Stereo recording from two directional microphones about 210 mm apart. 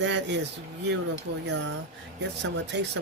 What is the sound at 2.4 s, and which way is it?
Speech, 55° right (ahead or behind).